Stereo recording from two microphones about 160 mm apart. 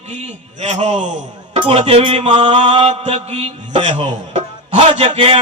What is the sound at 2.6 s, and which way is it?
Music, 45° right (ahead or behind).